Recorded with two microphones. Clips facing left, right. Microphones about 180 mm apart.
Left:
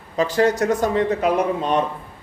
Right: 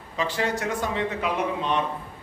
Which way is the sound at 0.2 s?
40° left (ahead or behind).